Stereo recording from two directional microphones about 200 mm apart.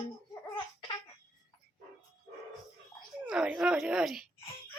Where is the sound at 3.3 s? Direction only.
5° right (ahead or behind).